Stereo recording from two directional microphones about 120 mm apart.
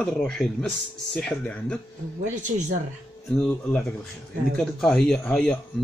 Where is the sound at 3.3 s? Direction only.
10° left (ahead or behind).